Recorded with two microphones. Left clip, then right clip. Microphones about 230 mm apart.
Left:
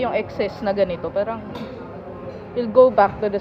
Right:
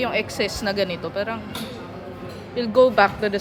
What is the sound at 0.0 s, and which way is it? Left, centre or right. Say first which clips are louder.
Speech: left 1 dB; centre.